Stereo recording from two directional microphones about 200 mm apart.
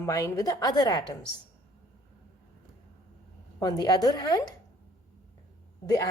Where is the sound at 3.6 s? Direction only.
20° left (ahead or behind).